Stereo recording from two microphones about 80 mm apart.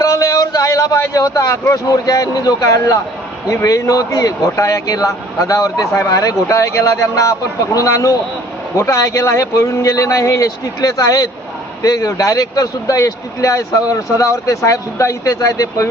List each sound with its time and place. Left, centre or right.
0.0 s a man's voice: left